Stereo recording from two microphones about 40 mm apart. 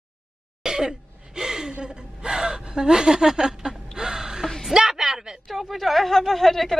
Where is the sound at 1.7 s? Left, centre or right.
Right.